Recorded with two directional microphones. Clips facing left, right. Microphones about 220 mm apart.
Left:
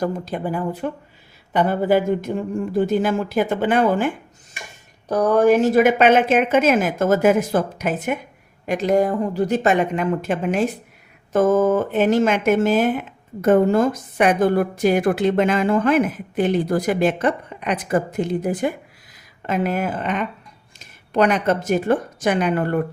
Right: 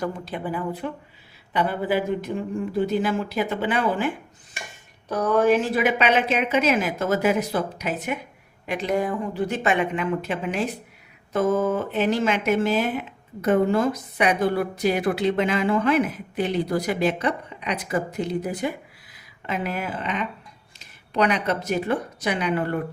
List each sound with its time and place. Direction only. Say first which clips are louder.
0.0 s a woman's voice: left 5 dB; 40° left (ahead or behind)